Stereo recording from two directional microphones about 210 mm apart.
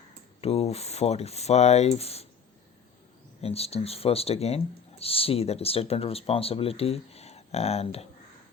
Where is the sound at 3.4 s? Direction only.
30° left (ahead or behind).